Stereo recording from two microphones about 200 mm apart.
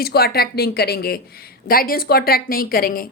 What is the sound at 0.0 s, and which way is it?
A woman's voice, 50° left (ahead or behind).